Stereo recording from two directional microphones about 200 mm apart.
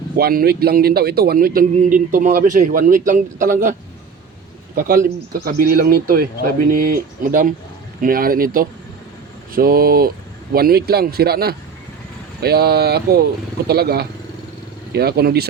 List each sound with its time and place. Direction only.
0.2 s a man's voice: 50° right (ahead or behind)